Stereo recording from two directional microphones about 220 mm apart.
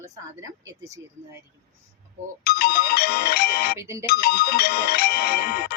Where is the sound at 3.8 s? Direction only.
10° right (ahead or behind).